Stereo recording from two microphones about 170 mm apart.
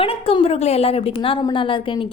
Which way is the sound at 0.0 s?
35° left (ahead or behind).